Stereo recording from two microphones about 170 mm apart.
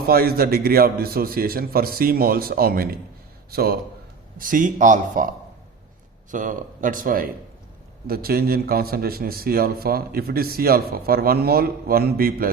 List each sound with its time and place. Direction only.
0.1 s a man's voice: 60° right (ahead or behind)
4.4 s a man's voice: 50° right (ahead or behind)
6.3 s a man's voice: 50° right (ahead or behind)